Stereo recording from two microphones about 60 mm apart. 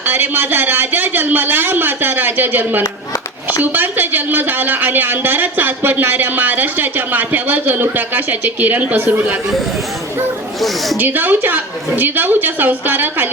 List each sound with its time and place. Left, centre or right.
0.0 s a woman's voice: right
10.9 s a woman's voice: right